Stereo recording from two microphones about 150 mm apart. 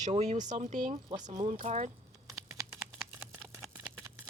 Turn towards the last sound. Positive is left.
turn(degrees=-10)  # may be behind; listen again after turning